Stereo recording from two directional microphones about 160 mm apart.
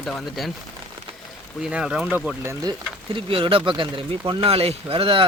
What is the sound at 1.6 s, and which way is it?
Speech, 5° right (ahead or behind).